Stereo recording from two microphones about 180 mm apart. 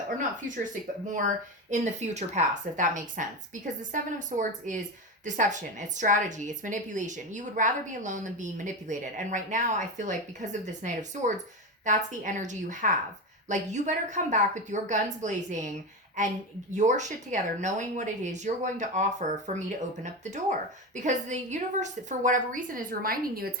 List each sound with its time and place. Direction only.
0.4 s speech: 45° right (ahead or behind)